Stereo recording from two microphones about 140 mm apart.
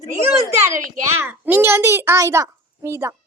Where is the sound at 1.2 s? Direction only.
15° right (ahead or behind).